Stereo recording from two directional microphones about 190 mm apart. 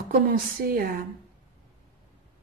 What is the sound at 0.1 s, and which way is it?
Speech, 50° right (ahead or behind).